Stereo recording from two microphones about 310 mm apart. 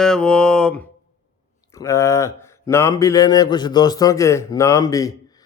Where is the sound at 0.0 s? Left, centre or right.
Centre.